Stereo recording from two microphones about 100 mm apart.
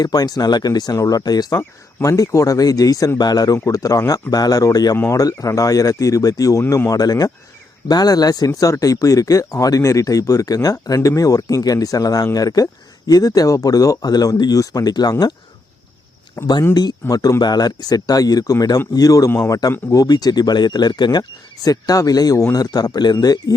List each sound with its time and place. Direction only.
0.0 s speech: 40° left (ahead or behind)
1.5 s speech: 30° left (ahead or behind)
4.9 s speech: 30° left (ahead or behind)
16.4 s speech: 30° left (ahead or behind)
19.3 s a man's voice: 25° left (ahead or behind)
19.9 s speech: 40° left (ahead or behind)